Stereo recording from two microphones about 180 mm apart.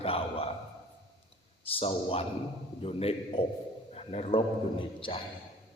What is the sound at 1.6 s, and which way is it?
A man's voice, 30° left (ahead or behind).